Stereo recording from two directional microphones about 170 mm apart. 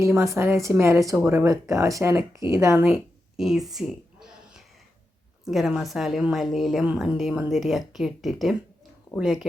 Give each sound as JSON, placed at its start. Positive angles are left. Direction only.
{"t": 0.0, "sound": "speech", "side_deg": -15}
{"t": 2.8, "sound": "a sound", "side_deg": -5}
{"t": 5.5, "sound": "a woman's voice", "side_deg": 0}